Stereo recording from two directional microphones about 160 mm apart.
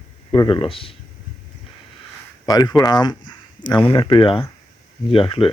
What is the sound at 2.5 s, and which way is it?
Speech, 25° left (ahead or behind).